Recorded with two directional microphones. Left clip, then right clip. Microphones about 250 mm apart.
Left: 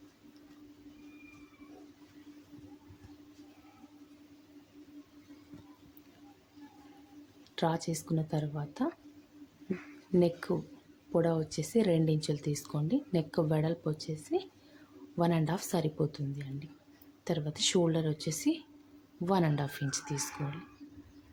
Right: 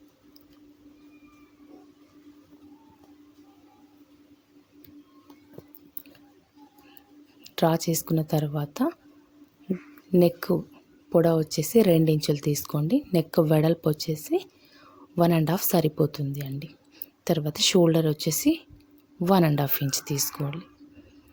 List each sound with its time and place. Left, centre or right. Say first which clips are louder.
7.4 s speech: right 9 dB; right
10.1 s speech: right 8 dB; right